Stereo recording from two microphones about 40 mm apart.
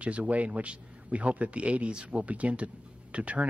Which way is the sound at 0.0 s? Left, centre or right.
Right.